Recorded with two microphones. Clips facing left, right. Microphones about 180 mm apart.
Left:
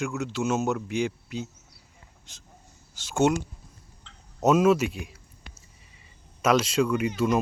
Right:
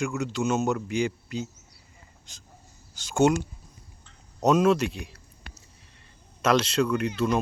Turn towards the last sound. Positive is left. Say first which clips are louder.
# left 1 dB
turn(degrees=10)  # may be behind; listen again after turning